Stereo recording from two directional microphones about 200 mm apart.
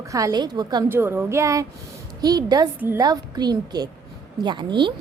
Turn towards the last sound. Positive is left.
turn(degrees=-25)  # may be behind; listen again after turning